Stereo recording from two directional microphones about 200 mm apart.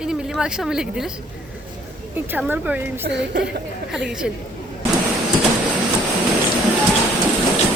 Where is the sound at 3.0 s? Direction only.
60° right (ahead or behind).